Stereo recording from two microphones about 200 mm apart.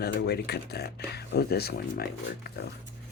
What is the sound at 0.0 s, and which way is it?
Speech, 55° left (ahead or behind).